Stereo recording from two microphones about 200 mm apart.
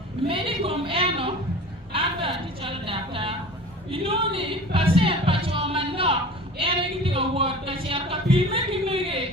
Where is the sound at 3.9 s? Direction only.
25° right (ahead or behind).